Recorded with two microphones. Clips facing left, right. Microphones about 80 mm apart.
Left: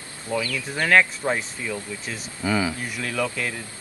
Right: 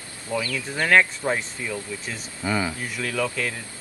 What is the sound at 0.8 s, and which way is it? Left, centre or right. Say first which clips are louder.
Speech: even; centre.